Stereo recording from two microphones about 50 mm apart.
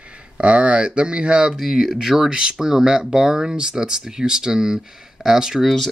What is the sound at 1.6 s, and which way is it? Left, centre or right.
Speech, centre.